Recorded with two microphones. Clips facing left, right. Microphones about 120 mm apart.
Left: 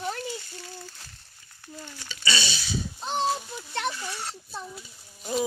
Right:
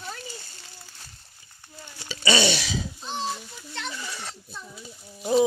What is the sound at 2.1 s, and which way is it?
Speech, 50° right (ahead or behind).